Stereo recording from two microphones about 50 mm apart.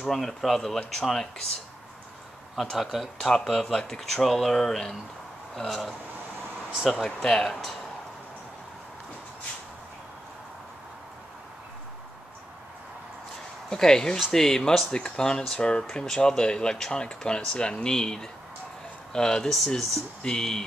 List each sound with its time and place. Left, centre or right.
0.0 s speech: centre
2.5 s speech: centre
13.7 s speech: centre